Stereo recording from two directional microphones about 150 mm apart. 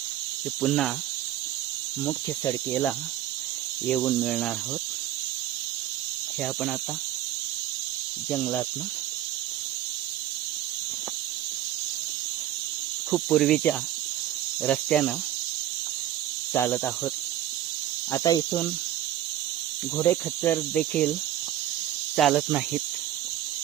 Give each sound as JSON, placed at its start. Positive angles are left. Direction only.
{"t": 0.6, "sound": "speech", "side_deg": 0}
{"t": 2.0, "sound": "speech", "side_deg": 15}
{"t": 6.4, "sound": "speech", "side_deg": 0}
{"t": 8.3, "sound": "speech", "side_deg": 10}
{"t": 13.1, "sound": "speech", "side_deg": 0}
{"t": 16.6, "sound": "speech", "side_deg": 10}
{"t": 18.1, "sound": "speech", "side_deg": 25}
{"t": 20.0, "sound": "speech", "side_deg": 15}
{"t": 22.1, "sound": "speech", "side_deg": 0}
{"t": 22.4, "sound": "cricket", "side_deg": -10}